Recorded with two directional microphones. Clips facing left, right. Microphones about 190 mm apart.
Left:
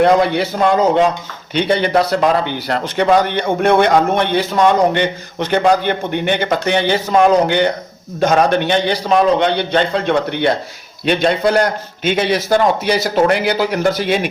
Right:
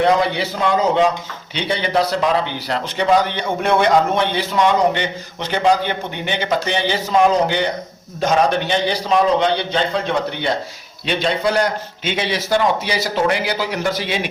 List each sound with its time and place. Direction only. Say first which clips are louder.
0.0 s a man's voice: left 4 dB; 55° left (ahead or behind)